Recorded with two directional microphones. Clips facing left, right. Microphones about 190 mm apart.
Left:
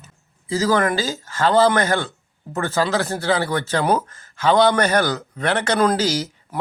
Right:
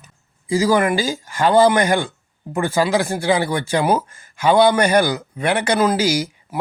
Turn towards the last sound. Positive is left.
turn(degrees=-10)  # may be behind; listen again after turning